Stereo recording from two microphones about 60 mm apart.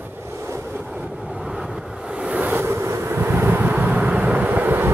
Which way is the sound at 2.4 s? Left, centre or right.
Right.